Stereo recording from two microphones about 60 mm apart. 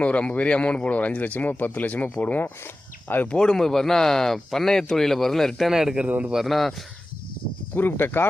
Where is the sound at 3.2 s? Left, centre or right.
Centre.